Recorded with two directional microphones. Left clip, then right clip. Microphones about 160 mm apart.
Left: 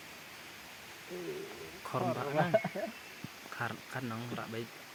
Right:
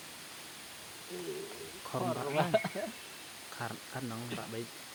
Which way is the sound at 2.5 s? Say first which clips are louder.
Even; 25° left (ahead or behind).